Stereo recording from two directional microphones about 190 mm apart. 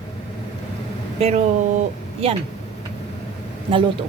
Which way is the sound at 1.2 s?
30° right (ahead or behind).